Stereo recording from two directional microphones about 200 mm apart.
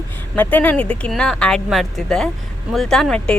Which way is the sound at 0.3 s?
10° left (ahead or behind).